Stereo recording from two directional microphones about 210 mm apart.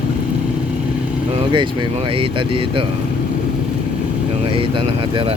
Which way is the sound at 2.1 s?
25° right (ahead or behind).